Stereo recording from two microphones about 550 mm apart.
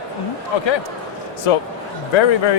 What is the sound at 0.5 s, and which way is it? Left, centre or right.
Speech, left.